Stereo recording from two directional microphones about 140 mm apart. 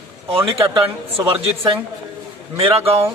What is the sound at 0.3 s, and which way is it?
A woman's voice, 40° right (ahead or behind).